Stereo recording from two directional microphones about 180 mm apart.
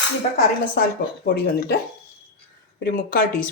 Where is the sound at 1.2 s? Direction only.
60° left (ahead or behind).